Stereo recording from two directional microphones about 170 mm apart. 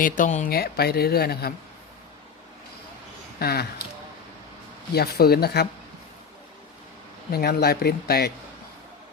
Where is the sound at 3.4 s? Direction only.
70° left (ahead or behind).